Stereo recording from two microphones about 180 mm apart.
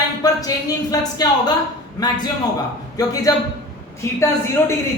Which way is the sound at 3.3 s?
15° left (ahead or behind).